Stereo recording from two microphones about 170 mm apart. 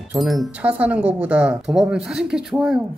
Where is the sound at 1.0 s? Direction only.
35° right (ahead or behind).